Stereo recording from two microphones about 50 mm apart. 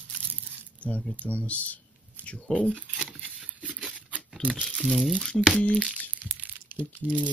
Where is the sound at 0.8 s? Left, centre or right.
Left.